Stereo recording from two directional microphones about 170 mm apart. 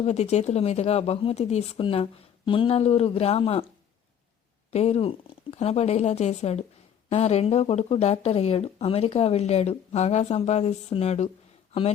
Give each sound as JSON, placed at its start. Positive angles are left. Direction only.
{"t": 0.0, "sound": "speech", "side_deg": 40}
{"t": 4.7, "sound": "speech", "side_deg": 40}